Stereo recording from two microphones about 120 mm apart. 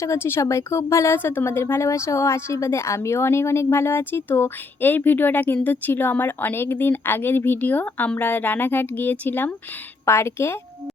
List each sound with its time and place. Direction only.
0.0 s a woman's voice: 20° left (ahead or behind)